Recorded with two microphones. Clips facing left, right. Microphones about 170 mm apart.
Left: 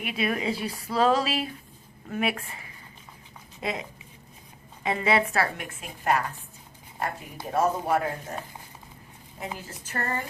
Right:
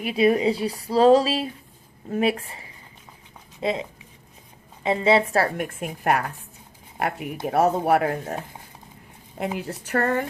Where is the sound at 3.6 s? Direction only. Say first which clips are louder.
Right 6 dB; 25° right (ahead or behind).